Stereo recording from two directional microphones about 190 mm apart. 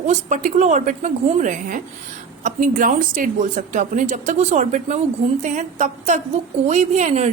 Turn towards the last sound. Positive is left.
turn(degrees=-35)  # may be behind; listen again after turning